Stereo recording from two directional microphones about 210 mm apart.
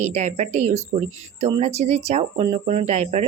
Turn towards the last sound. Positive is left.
turn(degrees=-35)  # may be behind; listen again after turning